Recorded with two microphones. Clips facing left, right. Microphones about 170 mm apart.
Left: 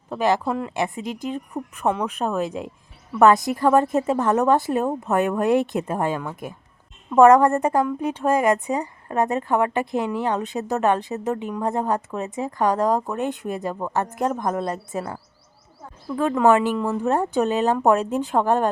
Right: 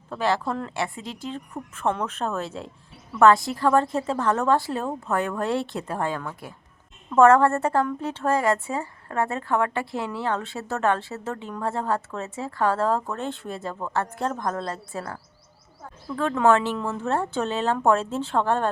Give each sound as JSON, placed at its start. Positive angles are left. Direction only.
{"t": 0.1, "sound": "a woman's voice", "side_deg": 15}